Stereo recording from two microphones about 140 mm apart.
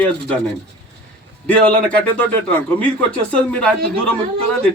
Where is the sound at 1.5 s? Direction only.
10° left (ahead or behind).